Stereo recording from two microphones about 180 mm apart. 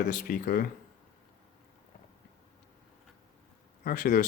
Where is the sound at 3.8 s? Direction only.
50° left (ahead or behind).